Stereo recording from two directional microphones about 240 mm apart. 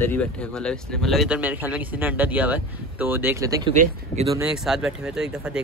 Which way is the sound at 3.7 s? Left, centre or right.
Right.